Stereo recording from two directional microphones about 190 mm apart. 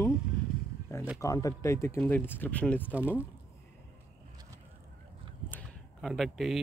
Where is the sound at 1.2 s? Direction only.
20° left (ahead or behind).